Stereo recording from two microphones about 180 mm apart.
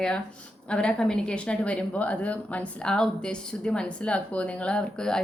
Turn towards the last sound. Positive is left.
turn(degrees=5)  # may be behind; listen again after turning